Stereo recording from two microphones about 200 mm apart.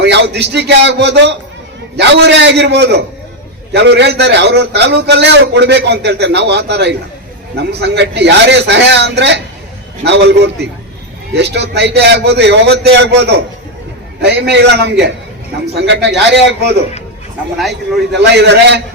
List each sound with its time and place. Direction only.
0.0 s a man's voice: 60° right (ahead or behind)
18.2 s a man's voice: 60° right (ahead or behind)